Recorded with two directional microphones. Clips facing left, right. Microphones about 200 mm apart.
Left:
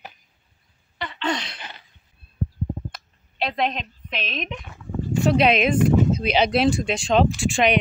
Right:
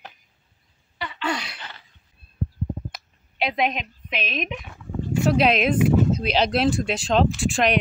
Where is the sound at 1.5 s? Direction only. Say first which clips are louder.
Left 1 dB; 15° left (ahead or behind).